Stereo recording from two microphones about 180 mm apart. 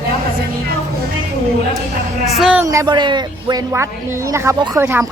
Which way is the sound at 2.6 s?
15° right (ahead or behind).